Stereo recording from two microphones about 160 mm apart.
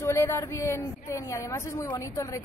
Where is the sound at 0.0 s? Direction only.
15° left (ahead or behind).